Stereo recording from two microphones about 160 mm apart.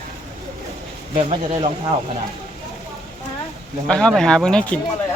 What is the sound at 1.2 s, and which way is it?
Speech, 35° right (ahead or behind).